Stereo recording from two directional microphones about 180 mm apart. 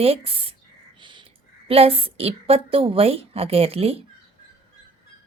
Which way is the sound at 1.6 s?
30° right (ahead or behind).